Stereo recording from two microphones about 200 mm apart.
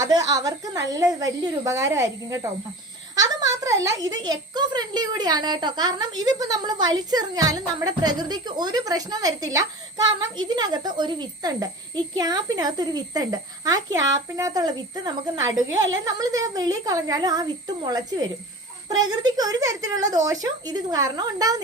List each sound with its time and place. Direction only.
0.0 s speech: 20° right (ahead or behind)
18.9 s speech: 20° right (ahead or behind)